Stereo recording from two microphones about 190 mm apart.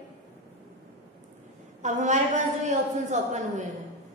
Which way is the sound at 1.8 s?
40° right (ahead or behind).